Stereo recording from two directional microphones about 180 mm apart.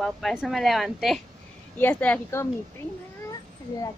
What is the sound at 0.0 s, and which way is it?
A woman's voice, centre (ahead or behind).